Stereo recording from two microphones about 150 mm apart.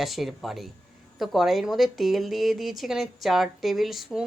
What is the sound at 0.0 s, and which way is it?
A woman's voice, centre (ahead or behind).